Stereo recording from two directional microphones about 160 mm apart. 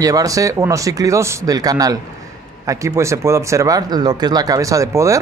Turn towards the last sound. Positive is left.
turn(degrees=-20)  # may be behind; listen again after turning